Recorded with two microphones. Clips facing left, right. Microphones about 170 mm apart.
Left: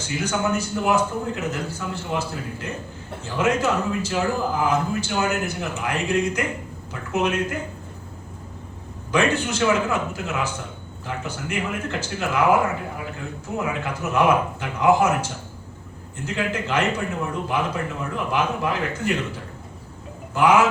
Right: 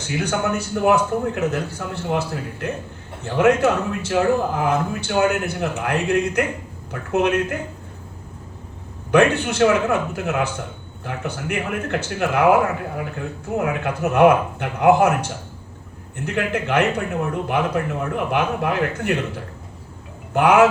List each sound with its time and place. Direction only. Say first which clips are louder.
0.0 s a man's voice: right 2 dB; 60° right (ahead or behind)
9.1 s a man's voice: right 5 dB; 60° right (ahead or behind)
20.3 s a man's voice: right 3 dB; 60° right (ahead or behind)